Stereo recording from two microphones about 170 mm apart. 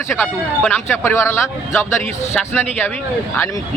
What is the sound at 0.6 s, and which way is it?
Speech, 10° left (ahead or behind).